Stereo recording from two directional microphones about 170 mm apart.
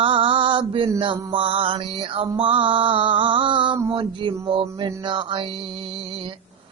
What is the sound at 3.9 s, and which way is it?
Music, 30° right (ahead or behind).